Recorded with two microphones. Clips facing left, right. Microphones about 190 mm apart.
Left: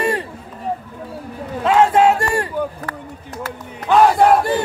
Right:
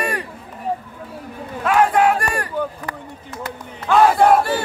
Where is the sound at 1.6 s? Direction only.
25° left (ahead or behind).